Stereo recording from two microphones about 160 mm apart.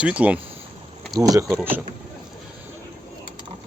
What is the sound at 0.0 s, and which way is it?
Speech, 10° right (ahead or behind).